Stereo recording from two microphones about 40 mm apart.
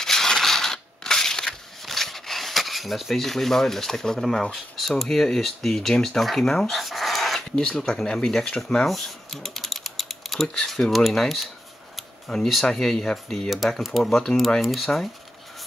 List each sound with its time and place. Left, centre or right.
0.0 s a sound: centre
4.7 s speech: centre
6.7 s dog: centre
7.5 s speech: centre
8.8 s mechanisms: centre
10.7 s speech: centre
12.6 s speech: centre